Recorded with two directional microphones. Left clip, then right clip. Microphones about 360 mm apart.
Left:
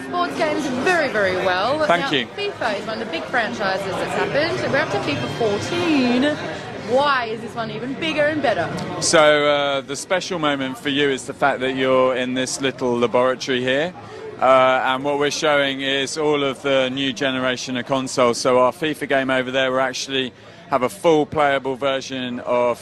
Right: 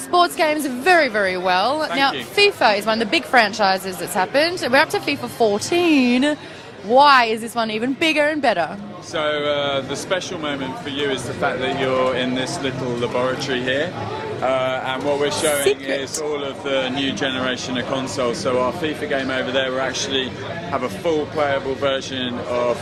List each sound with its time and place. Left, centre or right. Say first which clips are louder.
0.1 s speech: right 5 dB; right
9.1 s a man's voice: left 6 dB; left
10.4 s a man's voice: left 4 dB; left